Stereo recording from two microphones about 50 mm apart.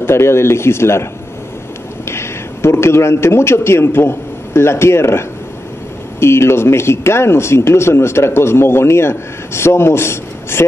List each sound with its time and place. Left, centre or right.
0.0 s speech: left
2.0 s a man's voice: left